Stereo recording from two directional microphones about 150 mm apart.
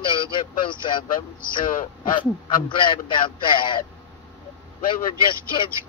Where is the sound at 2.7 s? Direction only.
35° left (ahead or behind).